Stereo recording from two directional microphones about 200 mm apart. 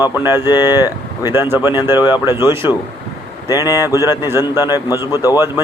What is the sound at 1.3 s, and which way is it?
Speech, 10° right (ahead or behind).